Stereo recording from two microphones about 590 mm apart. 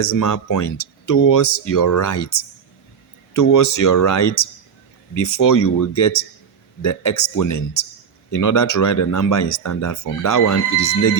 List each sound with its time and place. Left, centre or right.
0.0 s speech: left
3.3 s speech: left